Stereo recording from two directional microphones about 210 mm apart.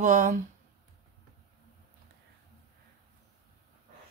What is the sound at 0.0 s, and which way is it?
Speech, 40° right (ahead or behind).